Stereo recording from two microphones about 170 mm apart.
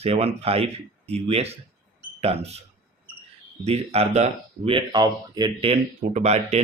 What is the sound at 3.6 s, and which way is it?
Speech, 35° right (ahead or behind).